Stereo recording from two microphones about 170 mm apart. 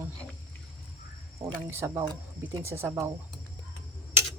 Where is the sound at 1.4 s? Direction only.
30° right (ahead or behind).